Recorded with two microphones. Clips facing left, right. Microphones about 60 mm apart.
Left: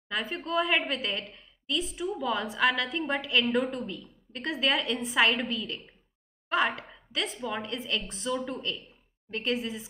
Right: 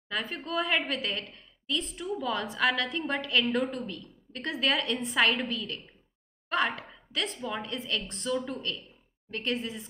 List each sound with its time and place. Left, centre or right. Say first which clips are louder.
0.1 s a woman's voice: left 2 dB; centre